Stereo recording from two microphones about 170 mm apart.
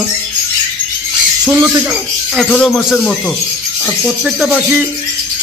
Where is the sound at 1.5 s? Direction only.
15° right (ahead or behind).